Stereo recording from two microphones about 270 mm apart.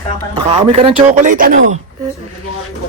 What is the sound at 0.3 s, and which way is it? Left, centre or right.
A man's voice, right.